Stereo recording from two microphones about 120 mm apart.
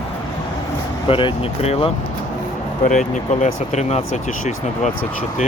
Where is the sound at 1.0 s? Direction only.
50° left (ahead or behind).